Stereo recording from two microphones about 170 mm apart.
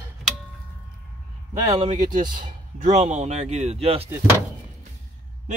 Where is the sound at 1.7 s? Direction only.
30° right (ahead or behind).